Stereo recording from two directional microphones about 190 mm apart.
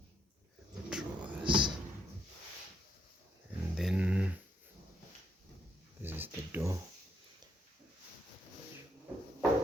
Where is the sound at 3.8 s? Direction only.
5° right (ahead or behind).